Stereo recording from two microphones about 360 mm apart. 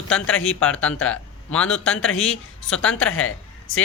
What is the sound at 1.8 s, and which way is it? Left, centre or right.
Speech, left.